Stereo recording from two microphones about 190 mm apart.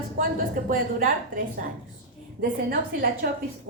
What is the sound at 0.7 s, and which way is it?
Speech, 45° right (ahead or behind).